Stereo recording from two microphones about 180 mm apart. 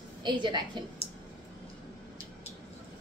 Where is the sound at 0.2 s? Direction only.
25° right (ahead or behind).